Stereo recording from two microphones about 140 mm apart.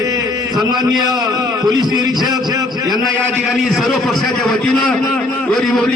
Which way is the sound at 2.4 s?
25° right (ahead or behind).